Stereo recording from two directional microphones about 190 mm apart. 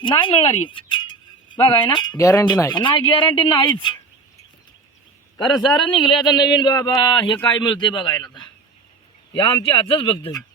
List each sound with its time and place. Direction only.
0.0 s speech: 25° left (ahead or behind)
2.7 s speech: 25° left (ahead or behind)
5.9 s speech: 25° left (ahead or behind)